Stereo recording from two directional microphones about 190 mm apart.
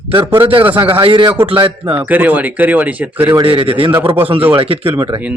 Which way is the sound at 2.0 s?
10° right (ahead or behind).